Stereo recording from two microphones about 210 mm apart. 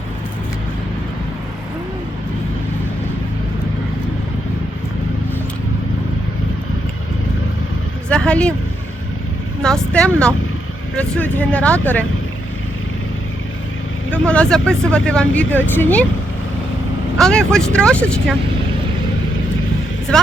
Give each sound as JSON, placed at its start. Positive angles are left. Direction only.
{"t": 8.1, "sound": "speech", "side_deg": 5}
{"t": 9.6, "sound": "speech", "side_deg": 5}
{"t": 14.1, "sound": "speech", "side_deg": 5}
{"t": 17.2, "sound": "speech", "side_deg": 5}